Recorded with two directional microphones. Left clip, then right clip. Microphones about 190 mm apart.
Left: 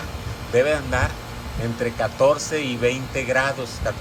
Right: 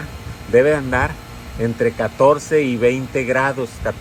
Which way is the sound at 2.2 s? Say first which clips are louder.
Right 6 dB; 40° right (ahead or behind).